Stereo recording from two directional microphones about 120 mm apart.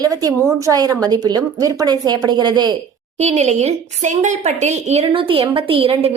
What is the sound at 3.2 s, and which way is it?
A woman's voice, 70° right (ahead or behind).